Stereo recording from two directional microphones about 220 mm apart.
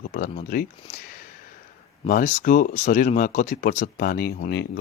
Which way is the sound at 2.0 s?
40° left (ahead or behind).